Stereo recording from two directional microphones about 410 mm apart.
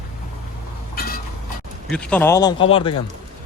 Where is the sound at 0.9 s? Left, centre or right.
Left.